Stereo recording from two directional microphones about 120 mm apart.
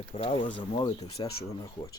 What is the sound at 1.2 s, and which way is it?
Speech, 35° left (ahead or behind).